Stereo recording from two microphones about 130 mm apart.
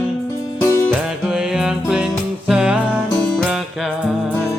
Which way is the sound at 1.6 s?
5° right (ahead or behind).